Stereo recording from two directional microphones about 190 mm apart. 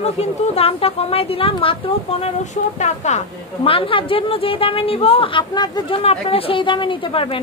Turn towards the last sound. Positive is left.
turn(degrees=30)  # may be behind; listen again after turning